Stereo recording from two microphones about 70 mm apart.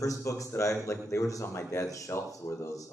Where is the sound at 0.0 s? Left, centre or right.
Left.